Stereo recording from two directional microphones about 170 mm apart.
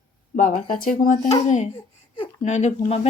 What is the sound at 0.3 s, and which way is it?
Speech, 50° left (ahead or behind).